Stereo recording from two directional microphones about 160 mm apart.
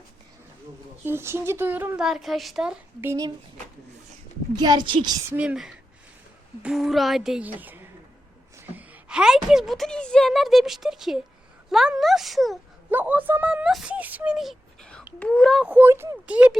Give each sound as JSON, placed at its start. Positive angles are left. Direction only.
{"t": 1.0, "sound": "a woman's voice", "side_deg": -15}
{"t": 3.0, "sound": "a woman's voice", "side_deg": -15}
{"t": 4.5, "sound": "a child's voice", "side_deg": -25}
{"t": 5.3, "sound": "a woman's voice", "side_deg": -10}
{"t": 12.9, "sound": "speech", "side_deg": -10}
{"t": 15.6, "sound": "a woman's voice", "side_deg": -10}